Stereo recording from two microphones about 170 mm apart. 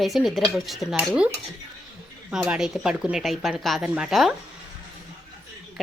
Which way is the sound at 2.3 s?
5° right (ahead or behind).